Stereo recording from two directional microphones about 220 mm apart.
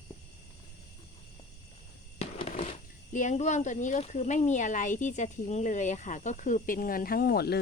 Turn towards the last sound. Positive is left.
turn(degrees=45)  # may be behind; listen again after turning